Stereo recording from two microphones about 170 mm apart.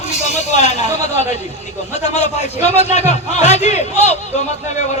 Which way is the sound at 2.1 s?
40° left (ahead or behind).